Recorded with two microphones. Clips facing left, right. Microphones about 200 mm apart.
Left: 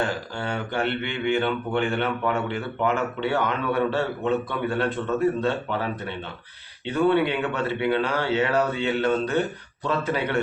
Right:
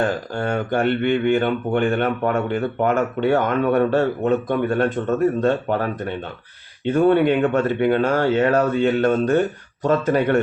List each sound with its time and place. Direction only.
0.0 s speech: 50° right (ahead or behind)